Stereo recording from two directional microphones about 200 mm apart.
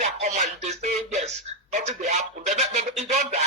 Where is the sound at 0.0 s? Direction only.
35° right (ahead or behind).